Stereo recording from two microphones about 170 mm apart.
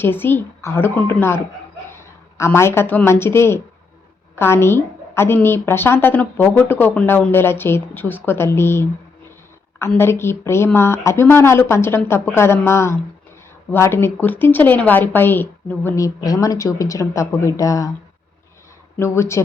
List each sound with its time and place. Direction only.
0.0 s a woman's voice: 10° left (ahead or behind)
18.9 s a woman's voice: 15° left (ahead or behind)